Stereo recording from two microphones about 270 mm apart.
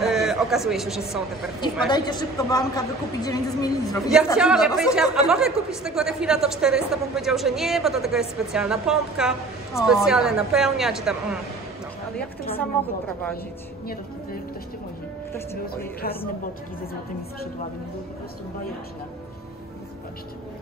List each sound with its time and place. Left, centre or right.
0.0 s a man's voice: centre
1.9 s a woman's voice: centre
4.4 s speech: centre
12.5 s a woman's voice: centre
15.6 s speech: left